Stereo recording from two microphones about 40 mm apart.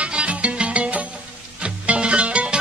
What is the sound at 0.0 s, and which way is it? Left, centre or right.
Music, right.